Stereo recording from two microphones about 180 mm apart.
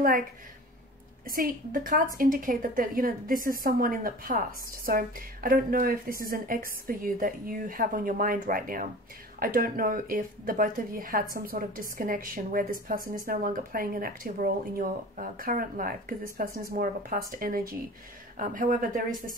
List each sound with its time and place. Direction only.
1.2 s a woman's voice: 50° right (ahead or behind)